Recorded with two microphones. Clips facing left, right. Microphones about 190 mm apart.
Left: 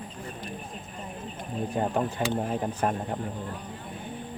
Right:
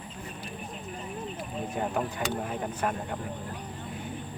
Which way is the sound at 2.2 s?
35° left (ahead or behind).